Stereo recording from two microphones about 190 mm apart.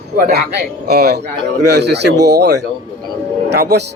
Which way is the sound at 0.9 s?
60° right (ahead or behind).